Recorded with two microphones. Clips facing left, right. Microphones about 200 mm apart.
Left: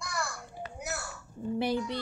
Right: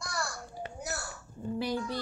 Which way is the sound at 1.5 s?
20° left (ahead or behind).